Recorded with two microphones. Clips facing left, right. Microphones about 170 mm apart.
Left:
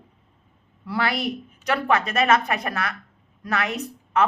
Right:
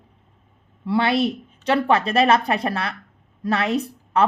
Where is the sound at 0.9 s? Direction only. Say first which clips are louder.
Right 6 dB; 25° right (ahead or behind).